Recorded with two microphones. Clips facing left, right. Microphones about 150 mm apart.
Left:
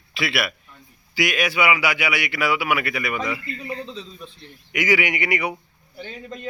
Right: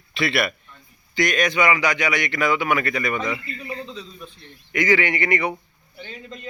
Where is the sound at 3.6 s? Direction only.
30° left (ahead or behind).